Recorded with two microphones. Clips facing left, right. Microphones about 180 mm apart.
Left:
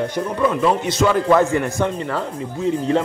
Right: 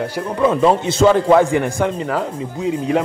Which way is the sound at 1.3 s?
10° right (ahead or behind).